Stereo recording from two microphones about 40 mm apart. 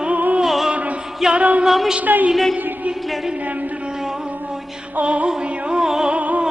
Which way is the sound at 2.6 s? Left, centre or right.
Right.